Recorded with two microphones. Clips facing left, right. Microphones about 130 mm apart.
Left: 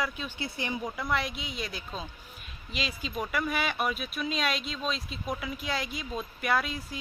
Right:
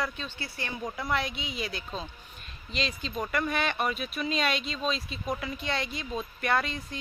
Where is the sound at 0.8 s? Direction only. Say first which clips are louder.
Right 2 dB; centre (ahead or behind).